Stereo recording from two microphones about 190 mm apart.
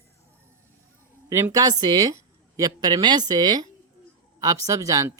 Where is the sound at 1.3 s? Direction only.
15° right (ahead or behind).